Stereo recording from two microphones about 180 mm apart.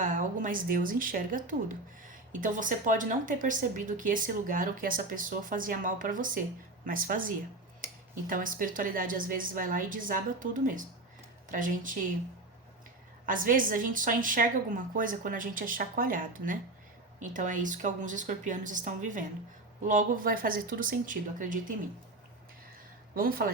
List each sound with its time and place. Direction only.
0.0 s speech: 45° right (ahead or behind)
13.2 s speech: 50° right (ahead or behind)
23.1 s speech: 55° right (ahead or behind)